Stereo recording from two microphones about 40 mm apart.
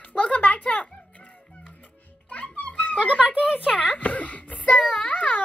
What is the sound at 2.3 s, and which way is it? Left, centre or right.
Music, left.